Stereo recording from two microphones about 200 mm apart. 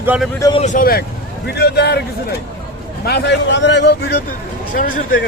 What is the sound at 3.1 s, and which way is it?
Speech, 60° left (ahead or behind).